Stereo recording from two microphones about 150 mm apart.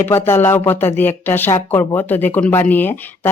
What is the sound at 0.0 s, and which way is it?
Speech, 15° left (ahead or behind).